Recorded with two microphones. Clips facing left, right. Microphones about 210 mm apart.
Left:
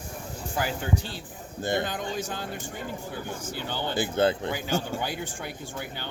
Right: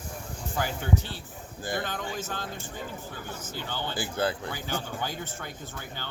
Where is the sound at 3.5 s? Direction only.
15° left (ahead or behind).